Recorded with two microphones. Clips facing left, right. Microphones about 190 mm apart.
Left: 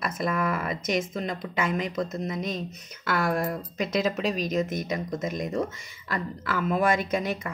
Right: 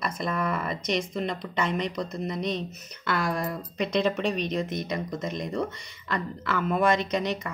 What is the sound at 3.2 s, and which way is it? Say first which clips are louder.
Speech: left 4 dB; 55° left (ahead or behind).